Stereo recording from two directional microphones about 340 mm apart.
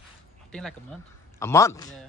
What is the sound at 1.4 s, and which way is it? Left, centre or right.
Speech, centre.